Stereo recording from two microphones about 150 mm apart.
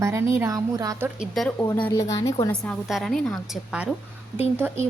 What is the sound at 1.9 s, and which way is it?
Speech, 20° left (ahead or behind).